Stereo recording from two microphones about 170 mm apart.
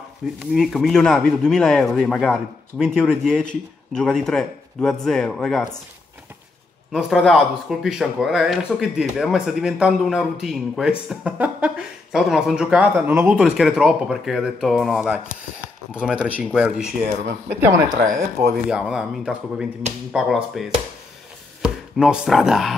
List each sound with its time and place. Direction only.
0.4 s speech: centre (ahead or behind)
6.9 s speech: centre (ahead or behind)
17.2 s speech: 70° right (ahead or behind)
18.7 s speech: 5° right (ahead or behind)